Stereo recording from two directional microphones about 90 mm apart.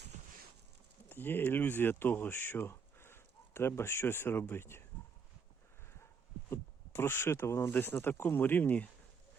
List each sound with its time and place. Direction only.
1.1 s speech: 25° left (ahead or behind)
6.5 s speech: 25° left (ahead or behind)